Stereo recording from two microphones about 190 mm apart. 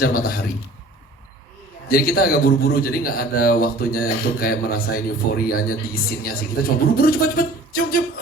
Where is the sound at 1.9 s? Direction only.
50° left (ahead or behind).